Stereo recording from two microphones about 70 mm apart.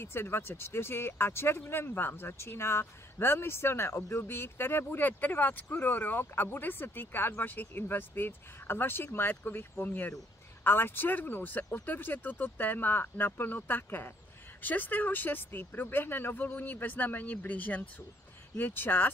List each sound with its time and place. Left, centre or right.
0.0 s speech: left